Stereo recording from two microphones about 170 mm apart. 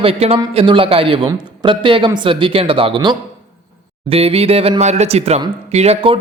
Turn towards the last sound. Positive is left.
turn(degrees=-35)  # may be behind; listen again after turning